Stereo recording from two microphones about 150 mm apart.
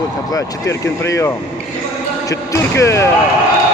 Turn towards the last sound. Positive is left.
turn(degrees=20)  # may be behind; listen again after turning